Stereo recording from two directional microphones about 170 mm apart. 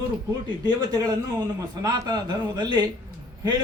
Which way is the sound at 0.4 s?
25° right (ahead or behind).